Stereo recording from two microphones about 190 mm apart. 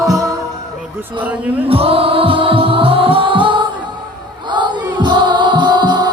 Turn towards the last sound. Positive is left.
turn(degrees=-20)  # may be behind; listen again after turning